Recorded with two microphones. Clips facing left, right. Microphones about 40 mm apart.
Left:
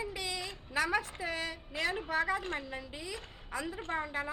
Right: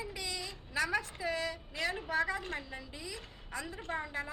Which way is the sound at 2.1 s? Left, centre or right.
Centre.